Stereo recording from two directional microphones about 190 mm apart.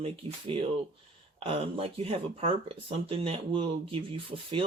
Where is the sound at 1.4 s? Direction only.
30° right (ahead or behind).